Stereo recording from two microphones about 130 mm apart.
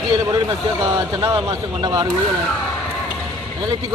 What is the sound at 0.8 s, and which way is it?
Speech, 30° right (ahead or behind).